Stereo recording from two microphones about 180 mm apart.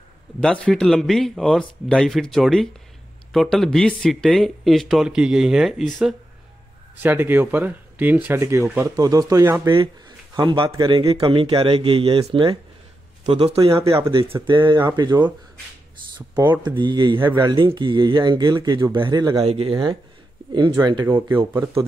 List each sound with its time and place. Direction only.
0.4 s speech: 5° left (ahead or behind)
7.0 s speech: 10° right (ahead or behind)
10.3 s speech: 25° right (ahead or behind)
17.2 s speech: 10° right (ahead or behind)
17.5 s speech: 25° right (ahead or behind)